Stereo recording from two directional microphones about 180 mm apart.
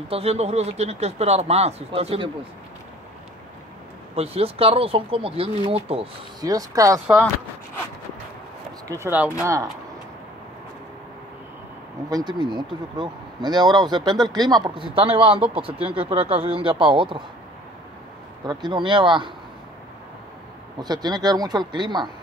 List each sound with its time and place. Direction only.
0.1 s speech: 35° right (ahead or behind)
4.1 s speech: 35° right (ahead or behind)
6.4 s speech: 20° right (ahead or behind)
8.8 s speech: 15° right (ahead or behind)
12.1 s speech: 20° right (ahead or behind)
18.4 s speech: 25° right (ahead or behind)
20.8 s speech: 20° right (ahead or behind)